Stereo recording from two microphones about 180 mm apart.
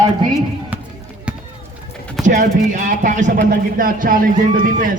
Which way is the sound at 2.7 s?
45° right (ahead or behind).